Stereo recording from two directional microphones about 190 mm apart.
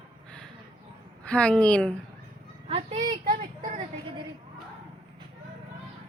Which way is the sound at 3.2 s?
45° right (ahead or behind).